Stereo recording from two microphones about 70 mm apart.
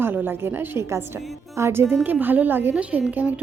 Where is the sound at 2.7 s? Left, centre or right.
Centre.